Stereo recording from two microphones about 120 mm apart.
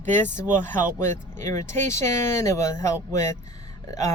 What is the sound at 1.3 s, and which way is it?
Speech, 20° left (ahead or behind).